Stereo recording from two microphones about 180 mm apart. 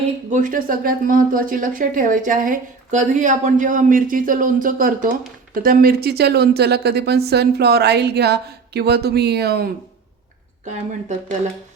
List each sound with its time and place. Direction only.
0.3 s a woman's voice: 45° right (ahead or behind); by 9.7 s 60° right (ahead or behind)